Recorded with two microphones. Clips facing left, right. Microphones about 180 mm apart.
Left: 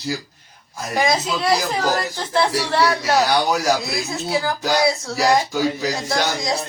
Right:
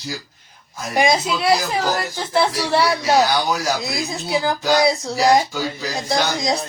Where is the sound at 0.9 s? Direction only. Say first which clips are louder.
Right 2 dB; 15° right (ahead or behind).